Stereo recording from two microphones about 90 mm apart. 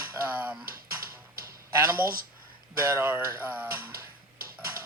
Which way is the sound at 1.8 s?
25° right (ahead or behind).